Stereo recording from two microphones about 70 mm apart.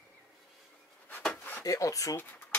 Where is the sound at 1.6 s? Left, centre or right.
Left.